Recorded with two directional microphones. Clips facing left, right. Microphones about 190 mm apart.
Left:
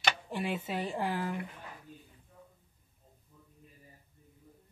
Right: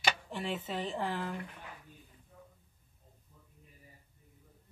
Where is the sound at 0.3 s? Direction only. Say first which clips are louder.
Left 2 dB; 10° left (ahead or behind).